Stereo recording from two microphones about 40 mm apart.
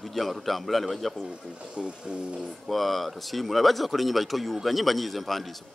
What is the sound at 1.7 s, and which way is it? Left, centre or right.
Speech, right.